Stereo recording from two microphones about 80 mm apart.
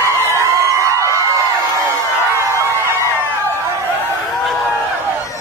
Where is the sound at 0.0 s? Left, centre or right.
Right.